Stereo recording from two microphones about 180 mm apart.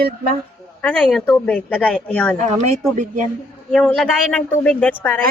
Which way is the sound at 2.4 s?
40° right (ahead or behind).